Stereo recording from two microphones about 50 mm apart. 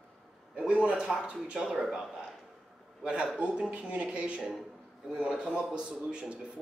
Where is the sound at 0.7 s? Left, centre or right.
Right.